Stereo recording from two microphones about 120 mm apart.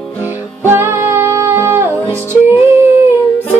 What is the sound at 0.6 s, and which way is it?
Music, 20° right (ahead or behind).